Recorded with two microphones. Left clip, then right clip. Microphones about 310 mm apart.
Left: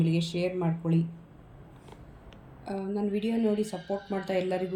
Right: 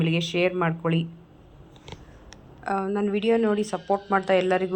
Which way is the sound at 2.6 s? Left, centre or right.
Right.